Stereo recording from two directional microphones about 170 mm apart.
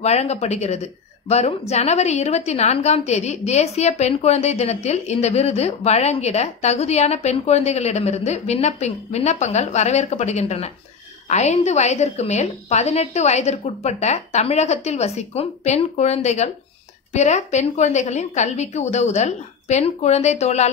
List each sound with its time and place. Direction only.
0.0 s a woman's voice: 40° left (ahead or behind)